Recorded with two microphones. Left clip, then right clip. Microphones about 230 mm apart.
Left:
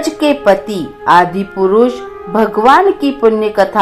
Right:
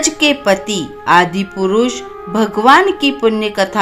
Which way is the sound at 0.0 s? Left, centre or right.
Right.